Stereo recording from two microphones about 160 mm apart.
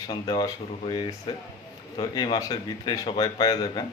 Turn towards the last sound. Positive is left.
turn(degrees=25)  # may be behind; listen again after turning